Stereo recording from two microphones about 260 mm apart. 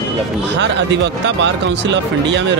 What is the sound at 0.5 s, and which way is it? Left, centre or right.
Speech, right.